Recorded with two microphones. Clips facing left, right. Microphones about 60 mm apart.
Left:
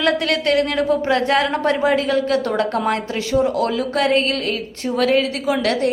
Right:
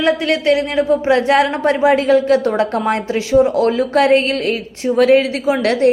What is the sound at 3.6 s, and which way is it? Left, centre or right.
A woman's voice, right.